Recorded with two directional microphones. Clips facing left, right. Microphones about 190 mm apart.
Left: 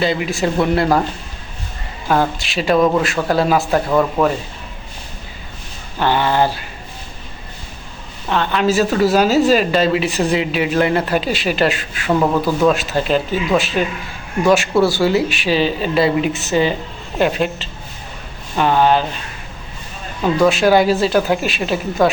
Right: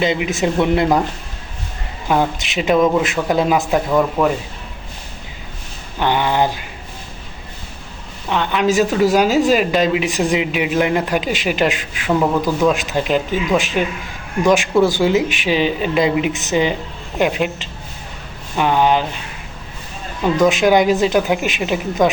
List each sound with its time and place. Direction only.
0.0 s a woman's voice: 20° right (ahead or behind)
2.4 s a woman's voice: 20° right (ahead or behind)
6.0 s a woman's voice: 15° right (ahead or behind)
8.3 s a woman's voice: 15° right (ahead or behind)
20.3 s a woman's voice: 15° right (ahead or behind)